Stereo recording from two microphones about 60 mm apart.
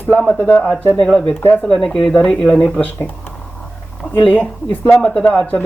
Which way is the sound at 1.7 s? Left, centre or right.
Centre.